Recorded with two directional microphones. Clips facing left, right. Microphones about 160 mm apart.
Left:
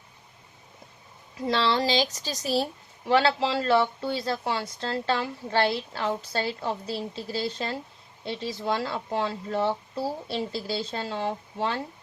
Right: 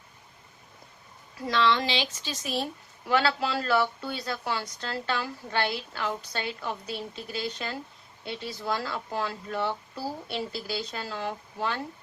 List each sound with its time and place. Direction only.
1.5 s a woman's voice: 30° left (ahead or behind)